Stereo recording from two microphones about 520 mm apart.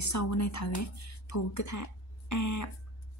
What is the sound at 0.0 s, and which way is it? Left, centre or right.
Speech, left.